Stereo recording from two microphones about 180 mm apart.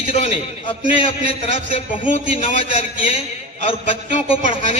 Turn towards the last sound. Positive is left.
turn(degrees=30)  # may be behind; listen again after turning